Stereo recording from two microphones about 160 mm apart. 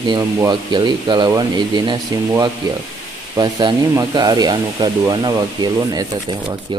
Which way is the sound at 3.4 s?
25° right (ahead or behind).